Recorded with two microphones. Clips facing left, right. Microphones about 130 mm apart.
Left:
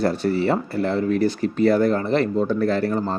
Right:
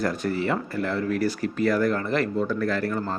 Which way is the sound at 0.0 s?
30° left (ahead or behind).